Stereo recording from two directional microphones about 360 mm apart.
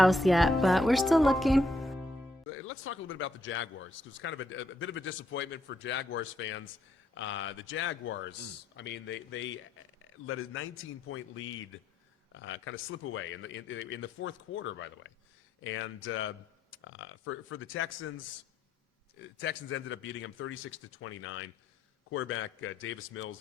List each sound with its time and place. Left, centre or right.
0.0 s speech: centre
2.5 s speech: left
19.2 s speech: left